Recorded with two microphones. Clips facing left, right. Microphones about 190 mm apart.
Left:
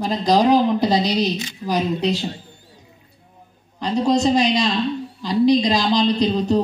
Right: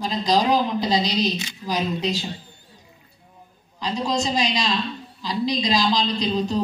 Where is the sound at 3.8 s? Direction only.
60° left (ahead or behind).